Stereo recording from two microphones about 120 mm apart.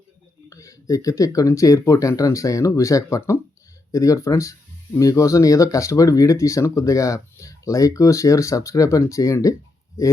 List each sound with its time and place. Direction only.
0.5 s speech: 25° left (ahead or behind)